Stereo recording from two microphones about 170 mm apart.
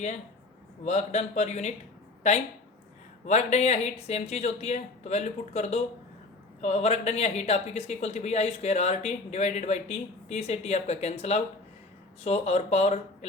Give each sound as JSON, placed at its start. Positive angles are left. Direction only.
{"t": 0.9, "sound": "speech", "side_deg": 40}
{"t": 3.2, "sound": "speech", "side_deg": 45}